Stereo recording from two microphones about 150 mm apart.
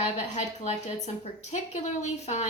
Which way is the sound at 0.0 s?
50° left (ahead or behind).